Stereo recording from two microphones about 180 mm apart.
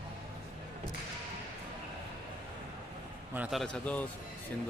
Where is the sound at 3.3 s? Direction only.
5° right (ahead or behind).